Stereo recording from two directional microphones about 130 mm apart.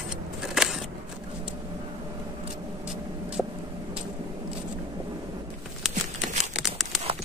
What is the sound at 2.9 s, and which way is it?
Vehicle, 5° right (ahead or behind).